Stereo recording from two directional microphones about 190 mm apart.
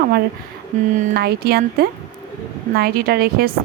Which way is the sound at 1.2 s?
55° right (ahead or behind).